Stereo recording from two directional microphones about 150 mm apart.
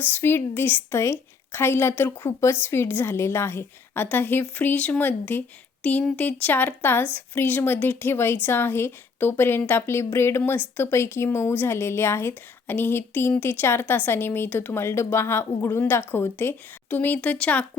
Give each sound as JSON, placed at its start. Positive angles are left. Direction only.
{"t": 0.0, "sound": "a woman's voice", "side_deg": 15}
{"t": 2.1, "sound": "speech", "side_deg": 25}
{"t": 2.5, "sound": "a woman's voice", "side_deg": 15}